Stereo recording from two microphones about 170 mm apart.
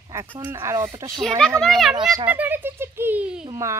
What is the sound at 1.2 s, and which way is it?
A child's voice, 5° left (ahead or behind).